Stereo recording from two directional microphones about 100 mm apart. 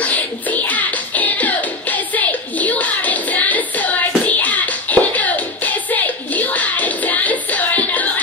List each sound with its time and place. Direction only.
0.0 s music: 15° left (ahead or behind)